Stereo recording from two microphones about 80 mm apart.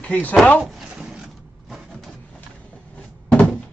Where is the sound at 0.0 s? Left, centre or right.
Centre.